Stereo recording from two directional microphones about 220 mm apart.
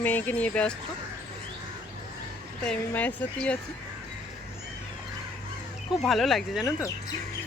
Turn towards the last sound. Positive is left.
turn(degrees=0)  # may be behind; listen again after turning